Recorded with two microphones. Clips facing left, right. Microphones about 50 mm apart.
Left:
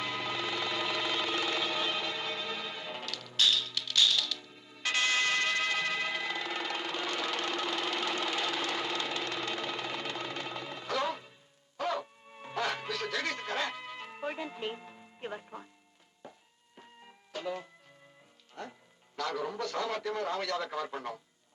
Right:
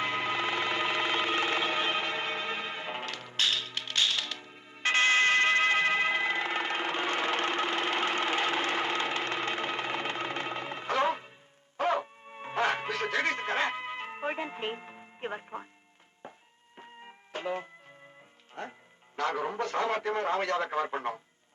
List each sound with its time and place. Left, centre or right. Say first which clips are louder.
0.0 s music: right 5 dB; right
19.1 s radio: right 4 dB; right